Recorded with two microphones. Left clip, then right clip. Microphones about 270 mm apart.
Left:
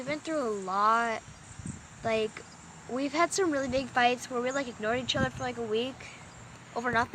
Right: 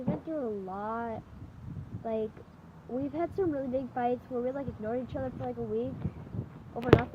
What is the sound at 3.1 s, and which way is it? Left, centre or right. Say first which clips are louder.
Speech: left 5 dB; left.